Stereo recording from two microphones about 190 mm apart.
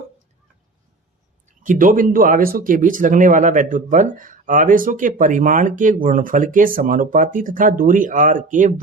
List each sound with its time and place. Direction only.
1.6 s speech: 45° right (ahead or behind)